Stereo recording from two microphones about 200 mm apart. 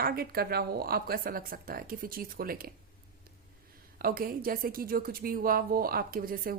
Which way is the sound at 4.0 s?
45° right (ahead or behind).